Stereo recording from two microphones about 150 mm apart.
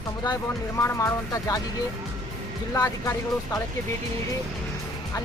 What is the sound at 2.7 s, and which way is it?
Speech, 20° left (ahead or behind).